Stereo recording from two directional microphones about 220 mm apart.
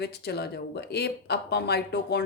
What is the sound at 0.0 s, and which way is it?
Speech, 50° left (ahead or behind).